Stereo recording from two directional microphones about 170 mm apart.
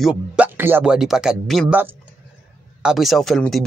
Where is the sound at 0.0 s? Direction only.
5° right (ahead or behind).